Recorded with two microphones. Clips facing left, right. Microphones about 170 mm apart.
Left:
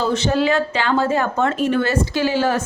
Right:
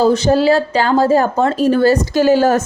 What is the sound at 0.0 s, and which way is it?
A woman's voice, 40° right (ahead or behind).